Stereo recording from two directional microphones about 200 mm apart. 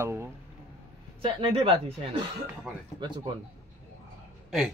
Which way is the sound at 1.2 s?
25° right (ahead or behind).